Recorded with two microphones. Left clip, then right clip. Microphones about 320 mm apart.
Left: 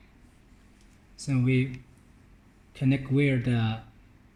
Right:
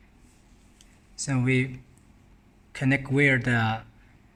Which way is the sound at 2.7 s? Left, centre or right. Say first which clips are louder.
Right 3 dB; right.